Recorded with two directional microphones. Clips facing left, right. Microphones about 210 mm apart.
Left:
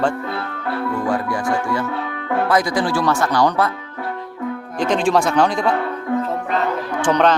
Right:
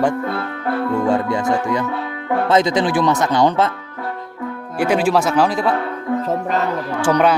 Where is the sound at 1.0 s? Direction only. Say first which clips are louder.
Right 3 dB; 25° right (ahead or behind).